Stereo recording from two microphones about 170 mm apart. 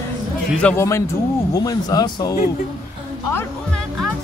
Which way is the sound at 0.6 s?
10° left (ahead or behind).